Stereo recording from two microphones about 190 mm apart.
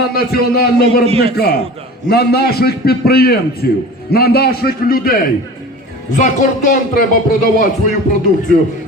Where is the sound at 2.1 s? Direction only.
55° left (ahead or behind).